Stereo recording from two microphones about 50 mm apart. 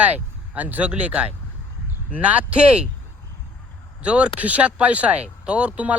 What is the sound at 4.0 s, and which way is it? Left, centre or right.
Speech, right.